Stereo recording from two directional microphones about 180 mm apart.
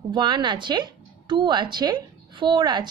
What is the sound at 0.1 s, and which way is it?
A woman's voice, 25° right (ahead or behind).